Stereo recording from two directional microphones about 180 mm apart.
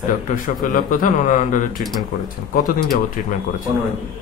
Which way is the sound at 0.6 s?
50° left (ahead or behind).